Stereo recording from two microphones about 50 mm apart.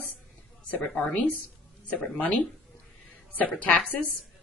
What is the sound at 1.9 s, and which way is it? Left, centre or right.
Speech, left.